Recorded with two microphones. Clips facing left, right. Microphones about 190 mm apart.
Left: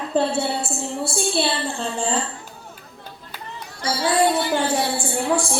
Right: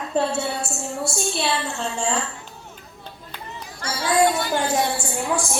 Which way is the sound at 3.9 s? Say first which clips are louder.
Even; 30° left (ahead or behind).